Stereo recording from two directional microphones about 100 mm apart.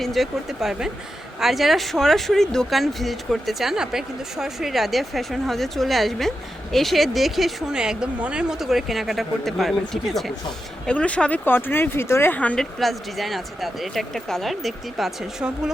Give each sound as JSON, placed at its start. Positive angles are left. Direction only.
{"t": 0.0, "sound": "speech", "side_deg": 0}
{"t": 10.8, "sound": "speech", "side_deg": 10}
{"t": 12.8, "sound": "speech", "side_deg": 0}